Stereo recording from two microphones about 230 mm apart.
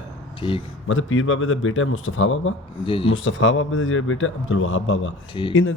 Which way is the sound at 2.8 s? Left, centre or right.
Left.